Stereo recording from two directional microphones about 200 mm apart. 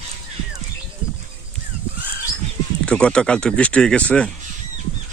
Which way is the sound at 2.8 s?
5° left (ahead or behind).